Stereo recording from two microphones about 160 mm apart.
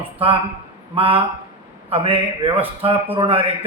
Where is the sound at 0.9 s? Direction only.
35° right (ahead or behind).